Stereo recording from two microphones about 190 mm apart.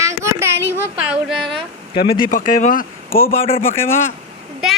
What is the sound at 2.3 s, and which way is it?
Speech, 45° left (ahead or behind).